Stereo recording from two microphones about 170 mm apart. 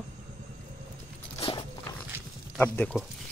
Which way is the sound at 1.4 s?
30° left (ahead or behind).